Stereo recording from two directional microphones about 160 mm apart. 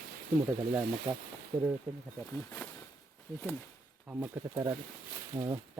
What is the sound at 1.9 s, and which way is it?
Speech, 10° right (ahead or behind).